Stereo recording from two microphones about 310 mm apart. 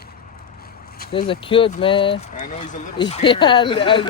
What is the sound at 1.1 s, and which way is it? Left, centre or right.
Speech, centre.